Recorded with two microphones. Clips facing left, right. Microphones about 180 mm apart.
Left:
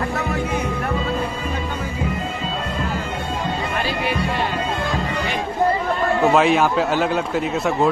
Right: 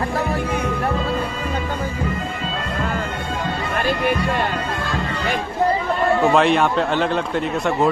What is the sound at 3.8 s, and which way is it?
Music, 50° right (ahead or behind).